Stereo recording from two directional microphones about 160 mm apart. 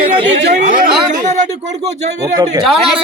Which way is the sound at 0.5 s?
55° right (ahead or behind).